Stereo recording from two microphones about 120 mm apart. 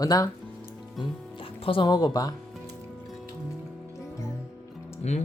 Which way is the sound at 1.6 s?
40° left (ahead or behind).